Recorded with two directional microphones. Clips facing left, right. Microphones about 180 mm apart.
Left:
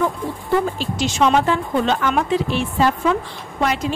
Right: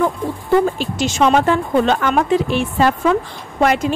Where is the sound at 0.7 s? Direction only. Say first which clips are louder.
Right 2 dB; 50° right (ahead or behind).